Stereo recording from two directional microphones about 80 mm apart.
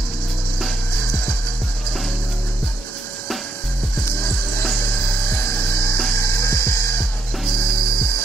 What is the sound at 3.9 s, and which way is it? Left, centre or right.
Music, left.